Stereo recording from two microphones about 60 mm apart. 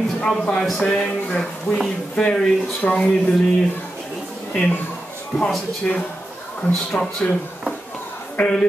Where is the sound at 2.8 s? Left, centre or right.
Left.